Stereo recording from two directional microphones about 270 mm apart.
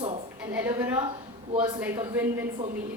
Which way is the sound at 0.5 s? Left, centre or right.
Centre.